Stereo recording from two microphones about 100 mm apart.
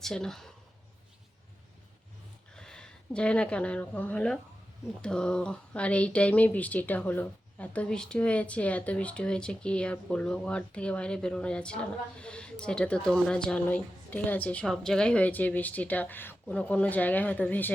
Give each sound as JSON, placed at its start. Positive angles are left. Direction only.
{"t": 0.0, "sound": "speech", "side_deg": 5}
{"t": 2.6, "sound": "a woman's voice", "side_deg": 10}